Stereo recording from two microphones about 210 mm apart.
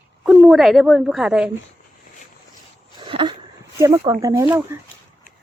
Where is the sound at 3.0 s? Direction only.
20° right (ahead or behind).